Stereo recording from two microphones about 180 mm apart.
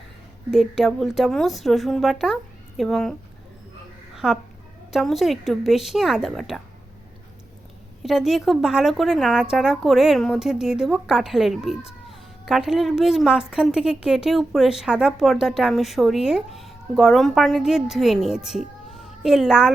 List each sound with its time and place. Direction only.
0.5 s a woman's voice: centre (ahead or behind)
4.1 s a sound: 5° right (ahead or behind)
4.9 s a woman's voice: centre (ahead or behind)
8.0 s a woman's voice: centre (ahead or behind)